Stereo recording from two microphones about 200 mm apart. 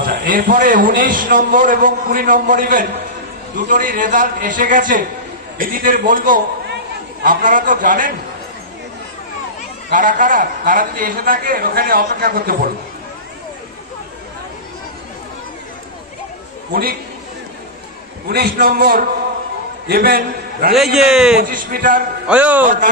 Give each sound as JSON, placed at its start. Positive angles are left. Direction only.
{"t": 0.0, "sound": "a man's voice", "side_deg": -45}
{"t": 9.8, "sound": "a man's voice", "side_deg": -40}
{"t": 16.7, "sound": "a man's voice", "side_deg": -45}
{"t": 18.3, "sound": "a man's voice", "side_deg": -50}
{"t": 20.7, "sound": "a man's voice", "side_deg": 0}
{"t": 21.4, "sound": "a man's voice", "side_deg": -45}
{"t": 22.3, "sound": "a man's voice", "side_deg": -5}